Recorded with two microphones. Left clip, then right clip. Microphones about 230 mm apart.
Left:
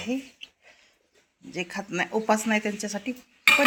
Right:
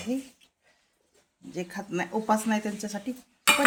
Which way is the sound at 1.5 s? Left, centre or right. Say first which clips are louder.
Left 3 dB; centre.